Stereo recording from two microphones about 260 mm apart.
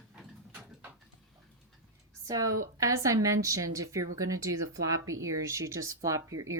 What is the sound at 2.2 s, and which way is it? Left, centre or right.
A woman's voice, centre.